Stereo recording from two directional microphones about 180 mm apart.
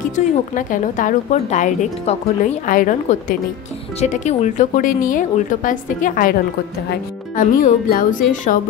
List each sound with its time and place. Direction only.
0.1 s a woman's voice: 45° left (ahead or behind)